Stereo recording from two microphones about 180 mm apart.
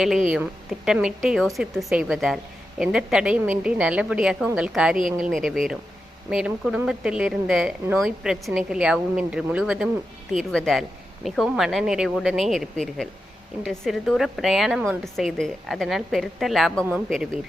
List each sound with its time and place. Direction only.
0.3 s speech: 5° right (ahead or behind)